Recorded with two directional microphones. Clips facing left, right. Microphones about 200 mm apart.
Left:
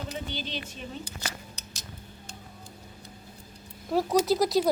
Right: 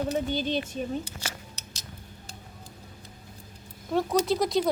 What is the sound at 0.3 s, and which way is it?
Speech, 45° right (ahead or behind).